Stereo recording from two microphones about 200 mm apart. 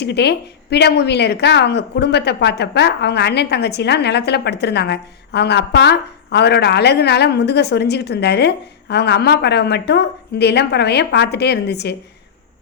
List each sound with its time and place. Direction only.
0.0 s a woman's voice: 55° left (ahead or behind)